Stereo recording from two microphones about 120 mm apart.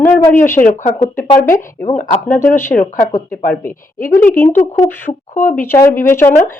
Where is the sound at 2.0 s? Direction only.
90° left.